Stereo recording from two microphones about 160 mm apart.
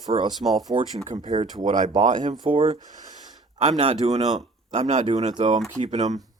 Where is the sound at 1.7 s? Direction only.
45° right (ahead or behind).